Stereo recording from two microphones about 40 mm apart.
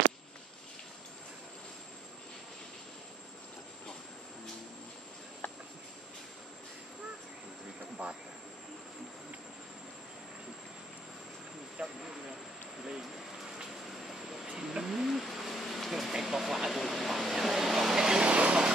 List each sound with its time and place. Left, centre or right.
5.4 s a sound: left
8.0 s train: right
11.8 s vehicle: right
14.0 s vehicle: centre
14.6 s bird: centre
16.1 s vehicle: centre
18.3 s a sound: right